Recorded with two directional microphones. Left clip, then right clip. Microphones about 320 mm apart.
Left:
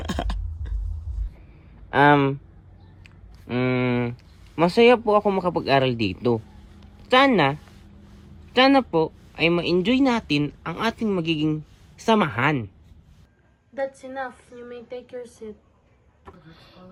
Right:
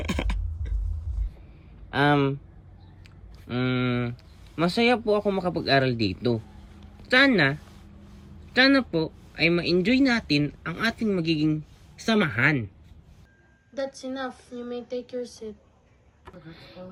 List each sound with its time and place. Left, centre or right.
1.9 s speech: left
3.4 s speech: left
5.7 s speech: centre
6.7 s a sound: centre
8.5 s speech: centre
13.7 s speech: centre